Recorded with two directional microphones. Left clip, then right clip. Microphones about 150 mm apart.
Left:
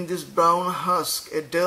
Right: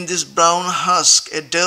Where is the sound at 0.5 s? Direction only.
15° right (ahead or behind).